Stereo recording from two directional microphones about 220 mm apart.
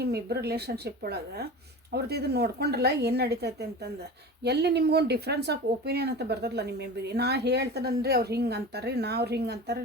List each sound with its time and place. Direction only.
0.0 s speech: 45° right (ahead or behind)